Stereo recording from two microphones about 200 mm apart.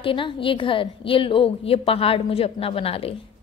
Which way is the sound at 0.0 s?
25° left (ahead or behind).